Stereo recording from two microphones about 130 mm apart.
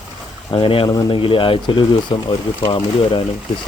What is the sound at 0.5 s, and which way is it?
A man's voice, 45° left (ahead or behind).